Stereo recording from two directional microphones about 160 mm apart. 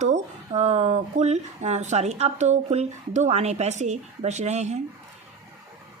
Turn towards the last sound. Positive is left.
turn(degrees=-45)  # may be behind; listen again after turning